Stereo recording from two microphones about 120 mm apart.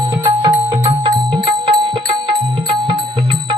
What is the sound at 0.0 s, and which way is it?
Music, 35° right (ahead or behind).